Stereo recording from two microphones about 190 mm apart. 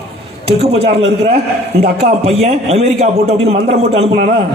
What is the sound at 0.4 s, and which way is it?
Speech, 30° right (ahead or behind).